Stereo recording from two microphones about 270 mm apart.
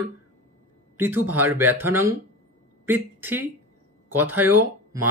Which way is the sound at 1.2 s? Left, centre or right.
Right.